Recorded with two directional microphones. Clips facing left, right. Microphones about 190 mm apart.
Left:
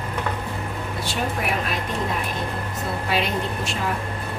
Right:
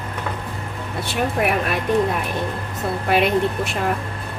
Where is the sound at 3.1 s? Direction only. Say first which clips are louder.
Right 8 dB; 60° right (ahead or behind).